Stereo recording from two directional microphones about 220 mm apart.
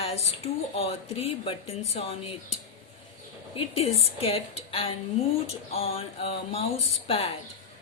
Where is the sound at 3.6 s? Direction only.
25° left (ahead or behind).